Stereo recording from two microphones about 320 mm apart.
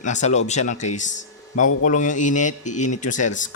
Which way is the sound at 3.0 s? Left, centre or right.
Left.